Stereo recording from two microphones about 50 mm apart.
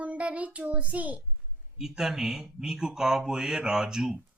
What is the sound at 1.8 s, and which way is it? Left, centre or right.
Speech, centre.